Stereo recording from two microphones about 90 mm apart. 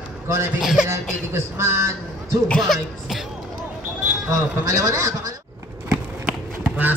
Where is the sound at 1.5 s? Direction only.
30° right (ahead or behind).